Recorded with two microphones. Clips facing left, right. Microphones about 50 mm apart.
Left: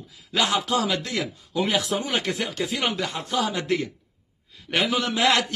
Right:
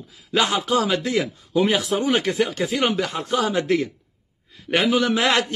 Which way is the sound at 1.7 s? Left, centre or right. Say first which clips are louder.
Right 3 dB; right.